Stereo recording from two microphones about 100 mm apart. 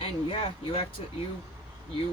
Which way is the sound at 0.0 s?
55° left (ahead or behind).